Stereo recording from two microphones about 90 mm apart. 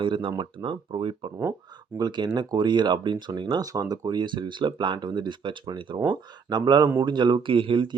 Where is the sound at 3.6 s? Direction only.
40° right (ahead or behind).